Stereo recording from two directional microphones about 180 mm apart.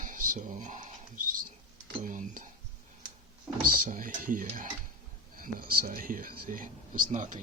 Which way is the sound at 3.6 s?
50° right (ahead or behind).